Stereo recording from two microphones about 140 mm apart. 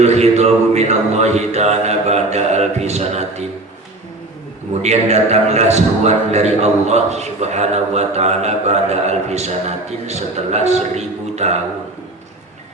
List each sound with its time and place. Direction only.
0.0 s a man's voice: 50° right (ahead or behind)
4.8 s a man's voice: 50° right (ahead or behind)